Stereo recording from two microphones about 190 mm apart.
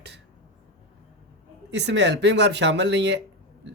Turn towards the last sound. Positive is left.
turn(degrees=-65)  # may be behind; listen again after turning